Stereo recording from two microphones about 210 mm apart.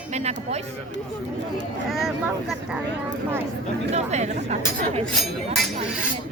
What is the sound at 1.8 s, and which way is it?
Speech, centre (ahead or behind).